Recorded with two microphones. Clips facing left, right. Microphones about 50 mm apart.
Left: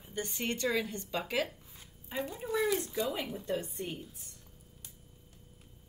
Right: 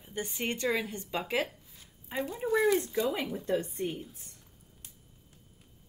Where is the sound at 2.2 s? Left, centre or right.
Centre.